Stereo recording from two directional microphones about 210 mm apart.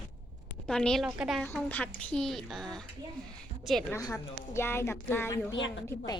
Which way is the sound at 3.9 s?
15° left (ahead or behind).